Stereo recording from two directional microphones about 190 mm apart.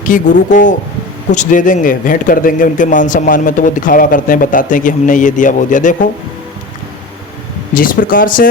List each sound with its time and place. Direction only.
0.1 s a man's voice: 45° left (ahead or behind)
7.7 s a man's voice: 45° left (ahead or behind)